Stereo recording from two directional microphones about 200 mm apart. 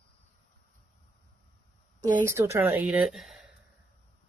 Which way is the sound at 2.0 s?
15° right (ahead or behind).